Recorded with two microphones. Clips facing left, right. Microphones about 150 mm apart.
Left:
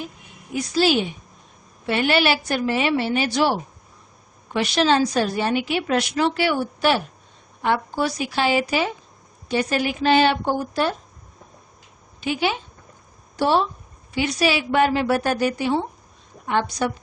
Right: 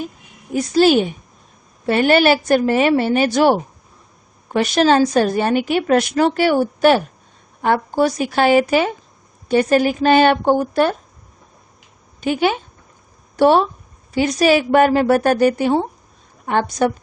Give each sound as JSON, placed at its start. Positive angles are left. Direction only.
{"t": 0.5, "sound": "speech", "side_deg": -45}
{"t": 12.2, "sound": "speech", "side_deg": -50}
{"t": 14.1, "sound": "speech", "side_deg": -45}